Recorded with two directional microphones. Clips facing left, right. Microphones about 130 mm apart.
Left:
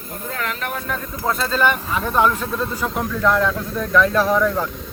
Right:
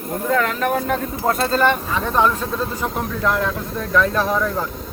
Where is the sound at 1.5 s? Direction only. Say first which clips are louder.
Right 1 dB; 35° right (ahead or behind).